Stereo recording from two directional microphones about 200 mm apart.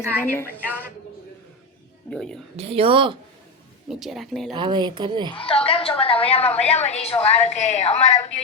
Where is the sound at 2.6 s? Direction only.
30° right (ahead or behind).